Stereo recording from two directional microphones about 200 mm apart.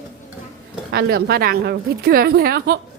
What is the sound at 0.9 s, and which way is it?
Speech, 55° right (ahead or behind).